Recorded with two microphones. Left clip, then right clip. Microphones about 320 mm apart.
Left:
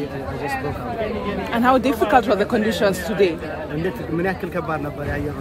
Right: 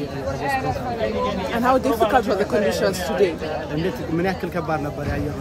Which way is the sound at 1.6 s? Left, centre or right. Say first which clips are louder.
Left 1 dB; left.